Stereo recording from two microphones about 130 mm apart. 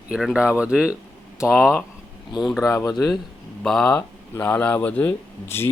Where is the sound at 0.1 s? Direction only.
5° right (ahead or behind).